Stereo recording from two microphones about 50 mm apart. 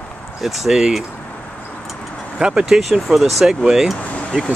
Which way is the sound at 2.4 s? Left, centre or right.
Centre.